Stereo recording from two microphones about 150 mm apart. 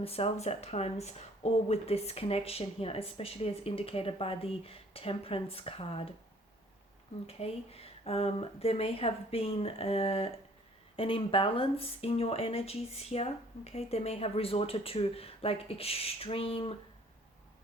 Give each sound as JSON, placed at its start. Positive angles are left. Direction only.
{"t": 0.0, "sound": "speech", "side_deg": 40}
{"t": 7.3, "sound": "speech", "side_deg": 40}